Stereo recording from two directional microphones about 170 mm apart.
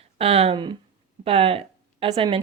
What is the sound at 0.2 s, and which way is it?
A woman's voice, 35° right (ahead or behind).